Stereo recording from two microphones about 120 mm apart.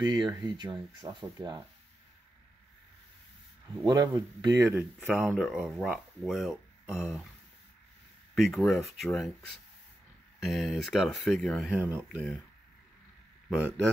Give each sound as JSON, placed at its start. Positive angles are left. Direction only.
{"t": 0.0, "sound": "speech", "side_deg": -30}
{"t": 3.8, "sound": "speech", "side_deg": -35}
{"t": 4.7, "sound": "speech", "side_deg": 0}
{"t": 8.4, "sound": "speech", "side_deg": 0}
{"t": 11.7, "sound": "speech", "side_deg": -15}